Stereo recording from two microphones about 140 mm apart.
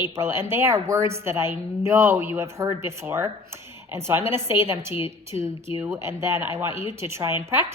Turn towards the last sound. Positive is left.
turn(degrees=-15)  # may be behind; listen again after turning